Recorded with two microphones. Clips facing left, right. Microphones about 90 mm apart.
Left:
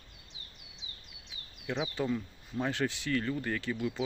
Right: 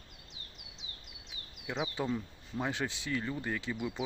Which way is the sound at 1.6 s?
15° right (ahead or behind).